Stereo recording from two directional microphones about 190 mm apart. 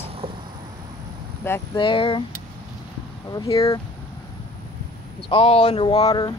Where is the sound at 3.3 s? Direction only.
15° left (ahead or behind).